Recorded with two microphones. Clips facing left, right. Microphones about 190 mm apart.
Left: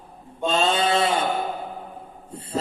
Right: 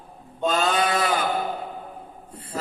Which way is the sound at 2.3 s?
25° left (ahead or behind).